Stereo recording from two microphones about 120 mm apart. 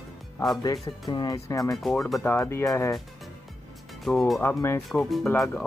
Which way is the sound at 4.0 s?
Centre (ahead or behind).